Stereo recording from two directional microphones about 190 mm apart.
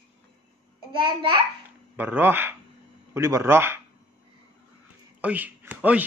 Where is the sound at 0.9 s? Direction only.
25° right (ahead or behind).